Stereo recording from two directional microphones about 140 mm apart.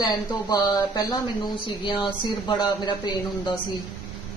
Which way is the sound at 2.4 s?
30° left (ahead or behind).